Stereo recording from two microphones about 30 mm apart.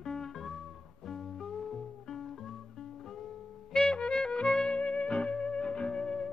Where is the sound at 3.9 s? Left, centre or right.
Left.